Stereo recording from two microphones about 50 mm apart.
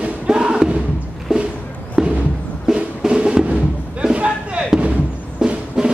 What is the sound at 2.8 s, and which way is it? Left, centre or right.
Music, centre.